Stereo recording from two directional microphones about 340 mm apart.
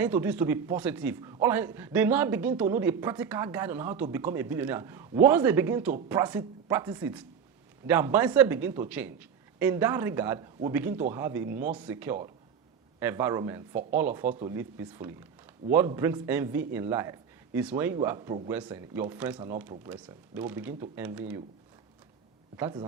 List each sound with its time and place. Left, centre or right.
0.0 s a man's voice: centre
22.5 s a man's voice: centre